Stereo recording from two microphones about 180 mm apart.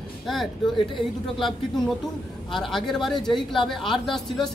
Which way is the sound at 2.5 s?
Centre (ahead or behind).